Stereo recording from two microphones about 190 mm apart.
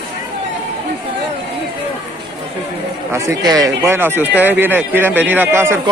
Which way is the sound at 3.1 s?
20° right (ahead or behind).